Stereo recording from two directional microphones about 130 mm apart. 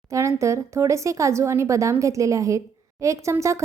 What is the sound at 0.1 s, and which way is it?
Speech, 20° right (ahead or behind).